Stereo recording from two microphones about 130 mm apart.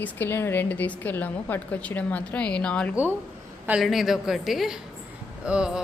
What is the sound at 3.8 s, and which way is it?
A woman's voice, centre (ahead or behind).